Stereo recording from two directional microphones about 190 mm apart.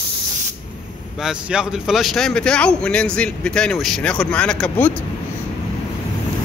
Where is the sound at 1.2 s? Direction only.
5° right (ahead or behind).